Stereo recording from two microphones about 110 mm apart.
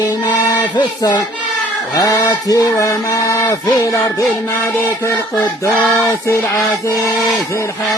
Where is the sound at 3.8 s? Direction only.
35° left (ahead or behind).